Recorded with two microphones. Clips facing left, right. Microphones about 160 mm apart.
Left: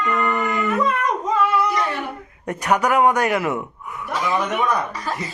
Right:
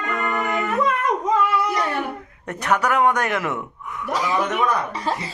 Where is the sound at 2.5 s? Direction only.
10° left (ahead or behind).